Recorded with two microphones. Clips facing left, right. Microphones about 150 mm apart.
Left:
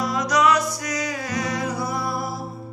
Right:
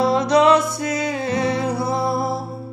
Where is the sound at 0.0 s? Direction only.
30° right (ahead or behind).